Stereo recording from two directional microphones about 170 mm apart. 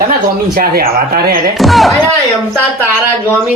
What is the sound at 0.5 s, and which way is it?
Speech, 60° right (ahead or behind).